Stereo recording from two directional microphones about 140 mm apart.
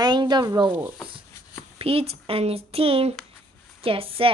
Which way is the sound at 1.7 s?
45° right (ahead or behind).